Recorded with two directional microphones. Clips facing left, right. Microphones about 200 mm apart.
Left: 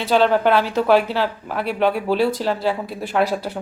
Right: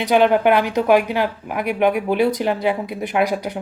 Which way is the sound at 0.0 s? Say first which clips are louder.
Right 2 dB; 15° right (ahead or behind).